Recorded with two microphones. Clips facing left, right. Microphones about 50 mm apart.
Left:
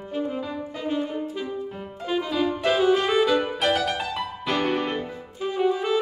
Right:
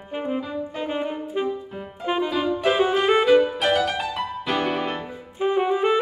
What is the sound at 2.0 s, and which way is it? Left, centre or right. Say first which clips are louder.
Music: right 3 dB; right.